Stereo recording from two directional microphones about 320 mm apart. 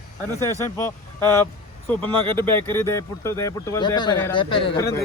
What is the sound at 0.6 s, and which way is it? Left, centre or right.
Speech, centre.